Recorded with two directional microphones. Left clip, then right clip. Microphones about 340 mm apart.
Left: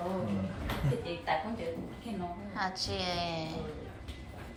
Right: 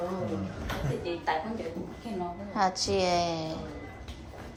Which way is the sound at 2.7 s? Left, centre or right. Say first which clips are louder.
Right 7 dB; right.